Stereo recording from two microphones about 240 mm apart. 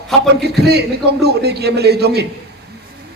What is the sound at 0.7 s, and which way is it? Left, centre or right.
A man's voice, right.